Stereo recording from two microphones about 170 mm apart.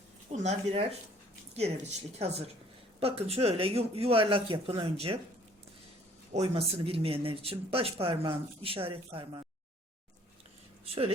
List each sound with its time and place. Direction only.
0.3 s speech: 40° right (ahead or behind)
6.3 s speech: 35° right (ahead or behind)